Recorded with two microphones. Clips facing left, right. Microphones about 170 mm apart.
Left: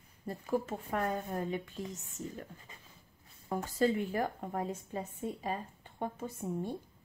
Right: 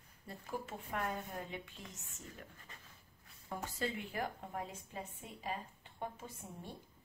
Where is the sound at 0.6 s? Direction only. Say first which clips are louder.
Left 6 dB; 45° left (ahead or behind).